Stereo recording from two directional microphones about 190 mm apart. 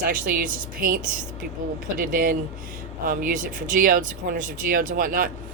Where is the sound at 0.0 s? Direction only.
50° right (ahead or behind).